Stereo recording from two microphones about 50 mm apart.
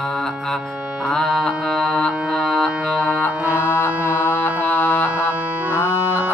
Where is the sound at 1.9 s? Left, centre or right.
Centre.